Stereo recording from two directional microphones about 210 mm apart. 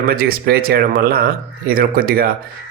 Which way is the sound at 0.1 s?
45° right (ahead or behind).